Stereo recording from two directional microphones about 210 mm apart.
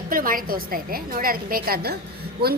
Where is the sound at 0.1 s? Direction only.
40° right (ahead or behind).